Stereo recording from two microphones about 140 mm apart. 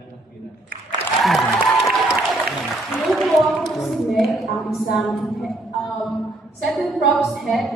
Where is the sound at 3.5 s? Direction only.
Centre (ahead or behind).